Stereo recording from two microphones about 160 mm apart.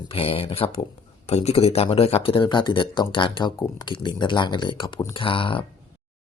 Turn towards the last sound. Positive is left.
turn(degrees=35)  # may be behind; listen again after turning